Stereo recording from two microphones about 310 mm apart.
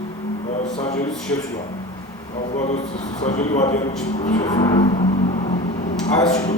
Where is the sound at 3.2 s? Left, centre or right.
Left.